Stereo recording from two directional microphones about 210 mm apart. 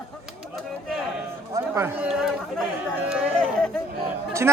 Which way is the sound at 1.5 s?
15° right (ahead or behind).